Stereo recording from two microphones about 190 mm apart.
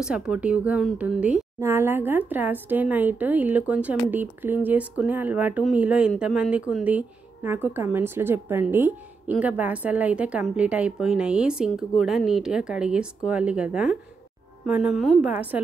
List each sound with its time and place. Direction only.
0.0 s speech: 5° right (ahead or behind)